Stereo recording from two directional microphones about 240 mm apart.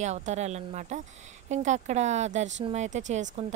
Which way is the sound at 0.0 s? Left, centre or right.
Right.